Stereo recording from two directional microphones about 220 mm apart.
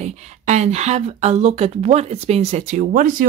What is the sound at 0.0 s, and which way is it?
Speech, 30° right (ahead or behind).